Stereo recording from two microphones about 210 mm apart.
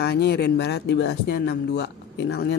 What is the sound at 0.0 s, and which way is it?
Speech, 50° left (ahead or behind).